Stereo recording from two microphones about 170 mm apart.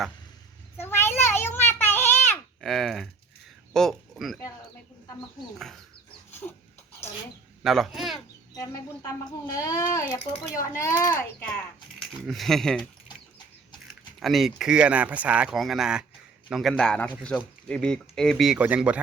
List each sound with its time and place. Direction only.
0.8 s child singing: 15° left (ahead or behind)
2.6 s speech: centre (ahead or behind)
6.4 s a sound: 10° left (ahead or behind)
7.6 s a sound: centre (ahead or behind)
8.5 s a child's voice: 20° left (ahead or behind)
12.2 s speech: centre (ahead or behind)
14.2 s speech: centre (ahead or behind)